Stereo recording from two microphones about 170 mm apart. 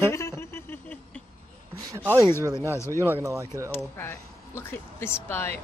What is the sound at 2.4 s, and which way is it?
Speech, 15° right (ahead or behind).